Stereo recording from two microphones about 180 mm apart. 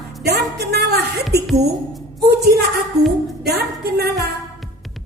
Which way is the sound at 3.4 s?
60° right (ahead or behind).